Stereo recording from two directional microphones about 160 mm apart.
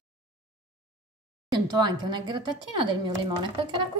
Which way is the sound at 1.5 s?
25° right (ahead or behind).